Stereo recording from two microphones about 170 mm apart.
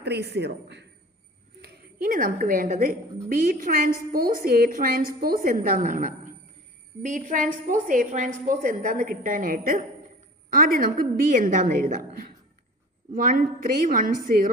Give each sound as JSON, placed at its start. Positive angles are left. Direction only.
{"t": 0.0, "sound": "a man's voice", "side_deg": -75}
{"t": 1.6, "sound": "a woman's voice", "side_deg": -60}
{"t": 13.1, "sound": "a woman's voice", "side_deg": -55}